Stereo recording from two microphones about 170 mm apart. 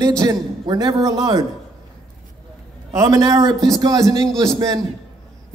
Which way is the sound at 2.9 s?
20° right (ahead or behind).